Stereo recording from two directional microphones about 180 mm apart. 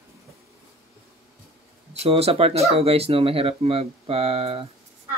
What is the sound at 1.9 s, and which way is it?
Speech, 35° right (ahead or behind).